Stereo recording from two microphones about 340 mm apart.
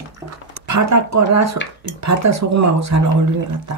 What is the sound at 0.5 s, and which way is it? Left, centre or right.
Speech, right.